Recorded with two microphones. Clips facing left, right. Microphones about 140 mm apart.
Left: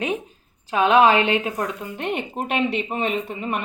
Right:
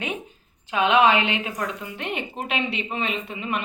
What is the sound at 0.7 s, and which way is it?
A woman's voice, 40° left (ahead or behind).